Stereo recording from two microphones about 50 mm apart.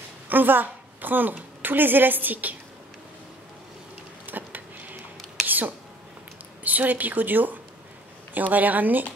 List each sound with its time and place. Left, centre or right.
0.3 s a woman's voice: right
4.3 s a sound: right
6.6 s a woman's voice: right